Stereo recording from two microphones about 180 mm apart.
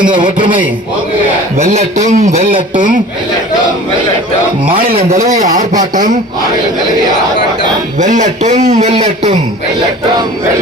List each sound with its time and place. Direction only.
0.0 s a man's voice: 25° right (ahead or behind)
2.7 s speech: 50° right (ahead or behind)
4.9 s a man's voice: 35° right (ahead or behind)
5.5 s a man's voice: 20° right (ahead or behind)
5.9 s speech: 45° right (ahead or behind)
7.9 s a man's voice: 45° right (ahead or behind)